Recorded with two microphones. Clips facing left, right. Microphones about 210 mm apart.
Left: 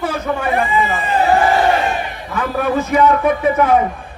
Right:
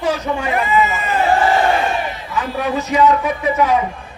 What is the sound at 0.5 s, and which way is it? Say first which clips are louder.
Speech: right 1 dB; 30° left (ahead or behind).